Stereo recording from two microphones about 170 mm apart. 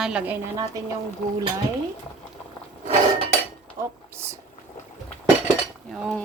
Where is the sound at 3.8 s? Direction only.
15° right (ahead or behind).